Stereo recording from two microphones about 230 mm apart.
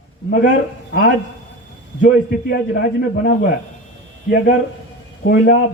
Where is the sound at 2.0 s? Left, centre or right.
Left.